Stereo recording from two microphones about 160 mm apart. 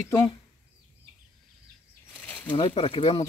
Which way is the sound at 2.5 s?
35° left (ahead or behind).